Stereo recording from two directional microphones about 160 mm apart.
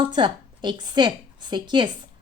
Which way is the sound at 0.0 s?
30° right (ahead or behind).